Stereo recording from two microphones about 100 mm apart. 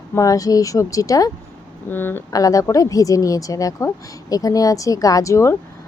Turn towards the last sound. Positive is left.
turn(degrees=30)  # may be behind; listen again after turning